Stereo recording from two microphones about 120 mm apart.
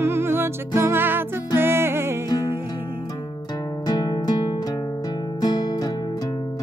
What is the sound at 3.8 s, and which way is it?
Music, 35° left (ahead or behind).